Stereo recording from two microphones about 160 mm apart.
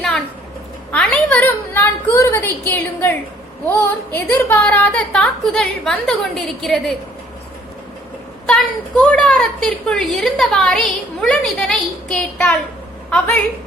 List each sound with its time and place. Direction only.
0.9 s a woman's voice: 5° left (ahead or behind)
8.4 s a woman's voice: 5° left (ahead or behind)